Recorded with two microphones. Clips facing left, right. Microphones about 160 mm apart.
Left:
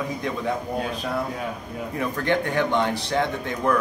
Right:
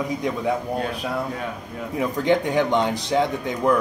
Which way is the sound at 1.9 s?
15° right (ahead or behind).